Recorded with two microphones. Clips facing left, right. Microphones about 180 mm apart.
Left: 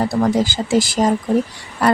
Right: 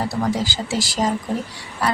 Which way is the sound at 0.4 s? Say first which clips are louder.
Left 7 dB; 50° left (ahead or behind).